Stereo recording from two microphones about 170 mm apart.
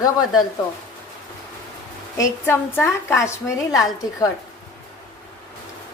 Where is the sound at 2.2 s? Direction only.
15° left (ahead or behind).